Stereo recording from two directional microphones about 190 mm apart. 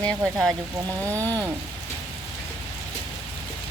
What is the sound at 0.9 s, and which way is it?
Speech, 15° right (ahead or behind).